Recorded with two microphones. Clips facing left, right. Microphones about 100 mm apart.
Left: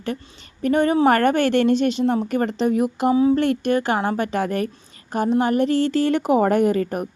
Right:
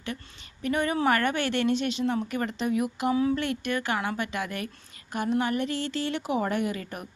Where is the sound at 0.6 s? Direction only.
35° left (ahead or behind).